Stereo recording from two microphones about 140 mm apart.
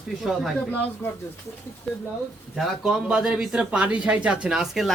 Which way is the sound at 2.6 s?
Centre (ahead or behind).